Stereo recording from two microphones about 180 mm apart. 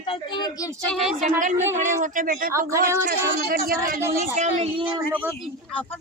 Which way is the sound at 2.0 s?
45° right (ahead or behind).